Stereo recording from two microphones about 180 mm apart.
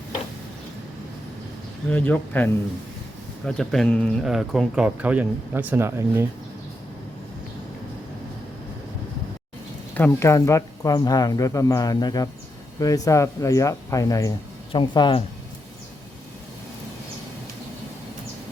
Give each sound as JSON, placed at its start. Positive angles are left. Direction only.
{"t": 1.9, "sound": "speech", "side_deg": 10}
{"t": 9.9, "sound": "speech", "side_deg": 15}